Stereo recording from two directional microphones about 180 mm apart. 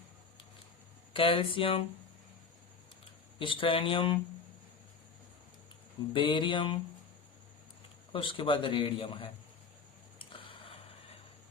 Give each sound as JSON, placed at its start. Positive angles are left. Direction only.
{"t": 1.1, "sound": "a man's voice", "side_deg": 30}
{"t": 3.3, "sound": "a man's voice", "side_deg": 30}
{"t": 6.1, "sound": "a man's voice", "side_deg": 25}
{"t": 8.1, "sound": "a man's voice", "side_deg": 30}
{"t": 10.2, "sound": "a sound", "side_deg": 30}